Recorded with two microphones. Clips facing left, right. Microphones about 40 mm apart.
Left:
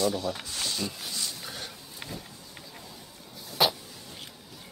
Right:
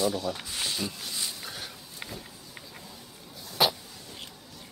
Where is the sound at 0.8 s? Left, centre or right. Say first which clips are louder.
Even; centre.